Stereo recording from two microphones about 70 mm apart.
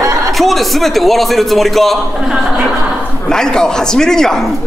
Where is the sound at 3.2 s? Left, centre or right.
Centre.